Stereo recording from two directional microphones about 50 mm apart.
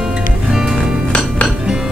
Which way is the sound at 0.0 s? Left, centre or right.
Centre.